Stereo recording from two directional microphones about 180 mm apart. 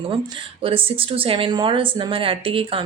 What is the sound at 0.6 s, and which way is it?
A woman's voice, 30° right (ahead or behind).